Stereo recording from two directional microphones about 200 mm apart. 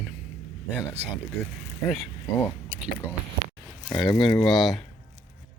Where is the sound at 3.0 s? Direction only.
10° left (ahead or behind).